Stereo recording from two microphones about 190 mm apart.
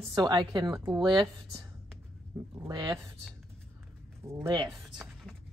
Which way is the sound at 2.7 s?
20° right (ahead or behind).